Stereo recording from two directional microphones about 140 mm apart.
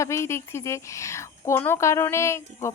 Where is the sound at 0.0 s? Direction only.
20° left (ahead or behind).